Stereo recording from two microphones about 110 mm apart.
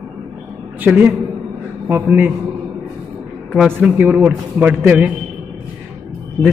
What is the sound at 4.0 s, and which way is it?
A man's voice, 15° right (ahead or behind).